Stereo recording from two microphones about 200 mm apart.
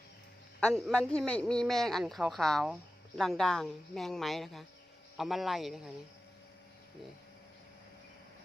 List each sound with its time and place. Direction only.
0.6 s a man's voice: 5° left (ahead or behind)